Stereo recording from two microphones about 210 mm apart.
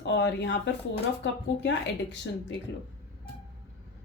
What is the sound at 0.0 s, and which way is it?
Speech, 60° left (ahead or behind).